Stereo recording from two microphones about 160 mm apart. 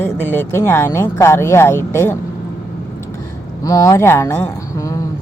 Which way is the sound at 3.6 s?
20° left (ahead or behind).